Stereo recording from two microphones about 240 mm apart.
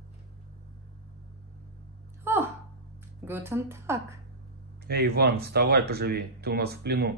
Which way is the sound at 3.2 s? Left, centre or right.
Centre.